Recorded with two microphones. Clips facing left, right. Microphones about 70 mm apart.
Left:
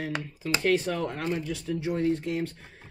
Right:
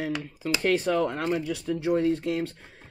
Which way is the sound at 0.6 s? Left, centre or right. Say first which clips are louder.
Right 3 dB; right.